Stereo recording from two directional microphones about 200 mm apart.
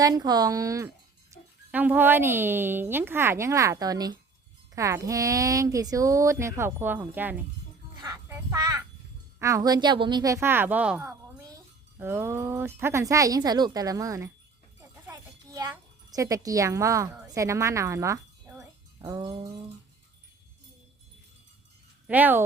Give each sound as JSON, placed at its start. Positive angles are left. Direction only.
{"t": 0.0, "sound": "speech", "side_deg": -20}
{"t": 8.0, "sound": "a sound", "side_deg": -15}
{"t": 9.4, "sound": "a child's voice", "side_deg": -15}
{"t": 15.0, "sound": "wind chime", "side_deg": -15}
{"t": 17.3, "sound": "speech", "side_deg": -15}
{"t": 19.0, "sound": "a sound", "side_deg": -20}
{"t": 22.0, "sound": "speech", "side_deg": -10}